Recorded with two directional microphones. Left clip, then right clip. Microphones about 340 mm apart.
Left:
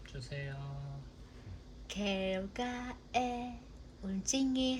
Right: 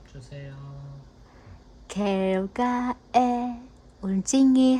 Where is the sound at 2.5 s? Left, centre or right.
Right.